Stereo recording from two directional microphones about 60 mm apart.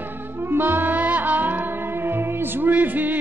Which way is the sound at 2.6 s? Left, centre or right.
Right.